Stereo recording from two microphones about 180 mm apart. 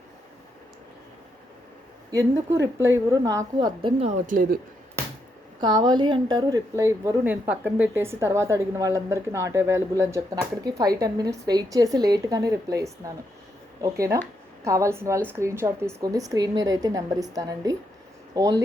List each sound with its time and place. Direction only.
2.1 s a woman's voice: 15° right (ahead or behind)
4.0 s speech: 50° right (ahead or behind)
5.5 s a woman's voice: 25° right (ahead or behind)